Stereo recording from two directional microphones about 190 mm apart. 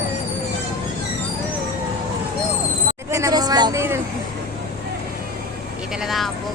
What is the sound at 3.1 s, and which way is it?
Vehicle, 20° right (ahead or behind).